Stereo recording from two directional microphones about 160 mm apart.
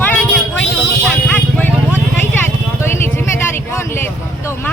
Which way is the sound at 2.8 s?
15° left (ahead or behind).